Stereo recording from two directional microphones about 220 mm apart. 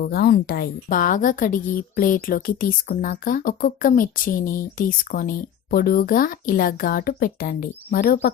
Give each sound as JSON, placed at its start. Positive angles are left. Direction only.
{"t": 0.0, "sound": "a woman's voice", "side_deg": 45}